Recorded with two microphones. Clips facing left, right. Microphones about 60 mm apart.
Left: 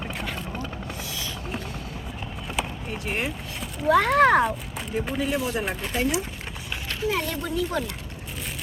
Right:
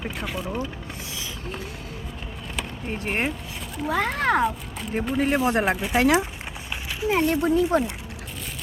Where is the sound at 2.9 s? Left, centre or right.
Right.